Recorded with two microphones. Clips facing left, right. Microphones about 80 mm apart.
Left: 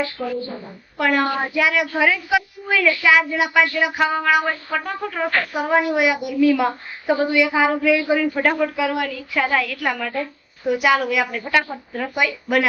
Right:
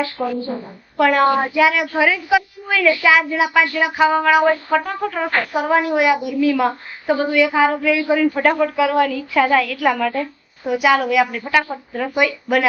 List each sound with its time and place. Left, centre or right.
0.2 s a woman's voice: right
0.9 s a woman's voice: centre